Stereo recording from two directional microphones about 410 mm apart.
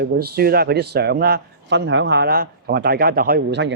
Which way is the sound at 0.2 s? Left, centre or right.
Right.